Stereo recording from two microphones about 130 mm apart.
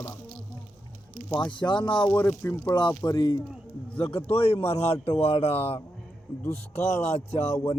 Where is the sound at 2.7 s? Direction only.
35° left (ahead or behind).